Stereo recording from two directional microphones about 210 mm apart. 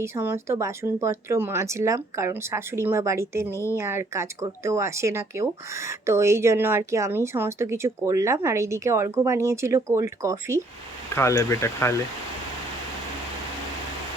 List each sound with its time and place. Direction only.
0.0 s speech: 10° right (ahead or behind)
11.1 s speech: 10° left (ahead or behind)